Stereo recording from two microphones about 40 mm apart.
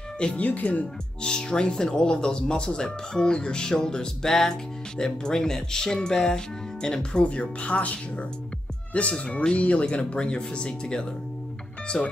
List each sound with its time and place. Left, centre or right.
0.4 s speech: left
1.2 s speech: centre